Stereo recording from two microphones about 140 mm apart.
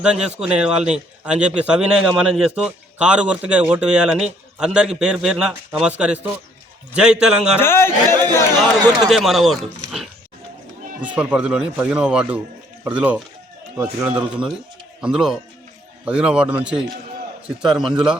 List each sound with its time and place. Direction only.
0.0 s speech: 5° right (ahead or behind)
7.6 s speech: 15° left (ahead or behind)
9.0 s speech: centre (ahead or behind)